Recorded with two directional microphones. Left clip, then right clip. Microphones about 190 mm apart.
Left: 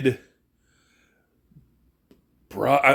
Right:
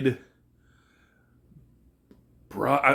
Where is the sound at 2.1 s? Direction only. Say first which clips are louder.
Left 2 dB; 25° left (ahead or behind).